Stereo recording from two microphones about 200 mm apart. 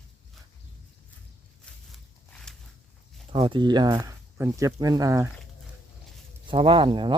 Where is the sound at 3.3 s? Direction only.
25° right (ahead or behind).